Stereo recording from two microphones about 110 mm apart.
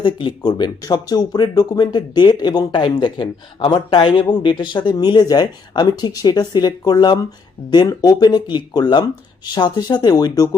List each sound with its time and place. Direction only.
0.0 s speech: 45° left (ahead or behind)